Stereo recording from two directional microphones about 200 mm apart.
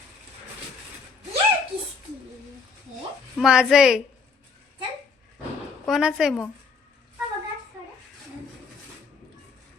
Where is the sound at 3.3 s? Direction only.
5° right (ahead or behind).